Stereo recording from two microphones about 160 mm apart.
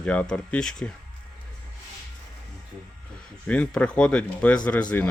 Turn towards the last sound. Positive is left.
turn(degrees=10)  # may be behind; listen again after turning